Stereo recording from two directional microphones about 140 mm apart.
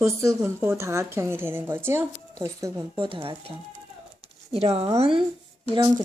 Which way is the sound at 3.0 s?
35° right (ahead or behind).